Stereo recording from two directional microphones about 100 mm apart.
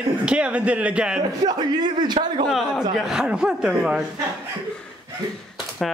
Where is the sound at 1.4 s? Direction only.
45° right (ahead or behind).